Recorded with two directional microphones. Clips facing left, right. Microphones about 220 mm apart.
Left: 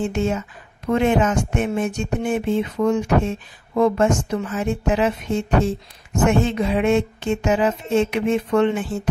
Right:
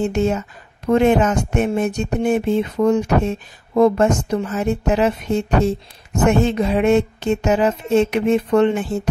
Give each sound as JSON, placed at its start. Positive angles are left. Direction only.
{"t": 0.0, "sound": "speech", "side_deg": -40}